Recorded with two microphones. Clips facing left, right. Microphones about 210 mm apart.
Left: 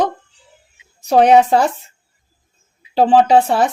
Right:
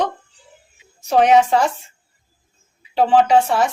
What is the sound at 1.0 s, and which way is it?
Speech, 35° left (ahead or behind).